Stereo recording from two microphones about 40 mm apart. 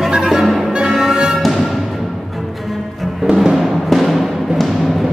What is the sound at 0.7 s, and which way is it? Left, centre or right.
Music, right.